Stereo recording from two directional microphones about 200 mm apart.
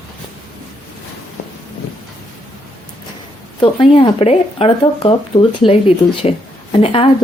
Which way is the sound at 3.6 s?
25° left (ahead or behind).